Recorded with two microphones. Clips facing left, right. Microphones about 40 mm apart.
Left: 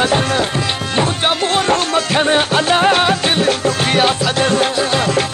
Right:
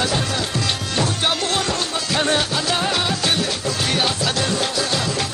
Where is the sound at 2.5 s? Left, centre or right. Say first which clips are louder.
Left 8 dB; left.